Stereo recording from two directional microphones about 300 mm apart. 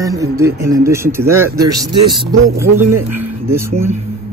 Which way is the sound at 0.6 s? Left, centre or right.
Centre.